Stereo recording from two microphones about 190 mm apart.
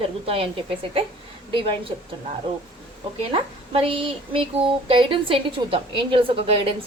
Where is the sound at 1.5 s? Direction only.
30° right (ahead or behind).